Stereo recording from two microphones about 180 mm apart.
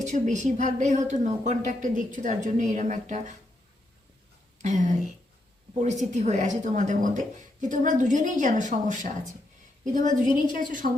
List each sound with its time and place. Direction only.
0.0 s speech: 40° right (ahead or behind)
4.6 s a woman's voice: 40° right (ahead or behind)